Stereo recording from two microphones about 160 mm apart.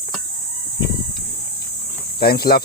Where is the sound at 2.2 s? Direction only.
75° left (ahead or behind).